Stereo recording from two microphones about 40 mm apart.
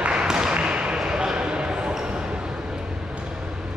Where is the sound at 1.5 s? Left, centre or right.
Right.